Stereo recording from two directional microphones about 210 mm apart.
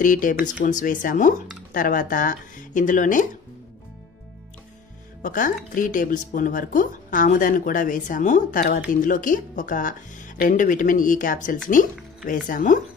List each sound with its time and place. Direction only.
0.0 s speech: 40° left (ahead or behind)
5.2 s speech: 40° left (ahead or behind)